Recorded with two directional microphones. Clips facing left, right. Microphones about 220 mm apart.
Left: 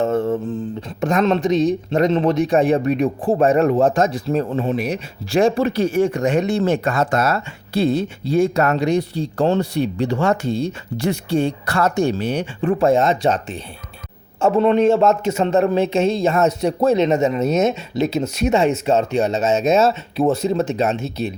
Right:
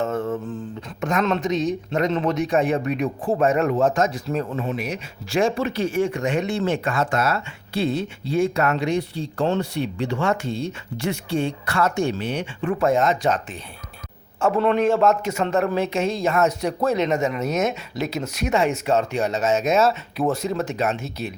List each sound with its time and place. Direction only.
0.0 s mantra: 30° left (ahead or behind)
1.0 s a man's voice: 30° left (ahead or behind)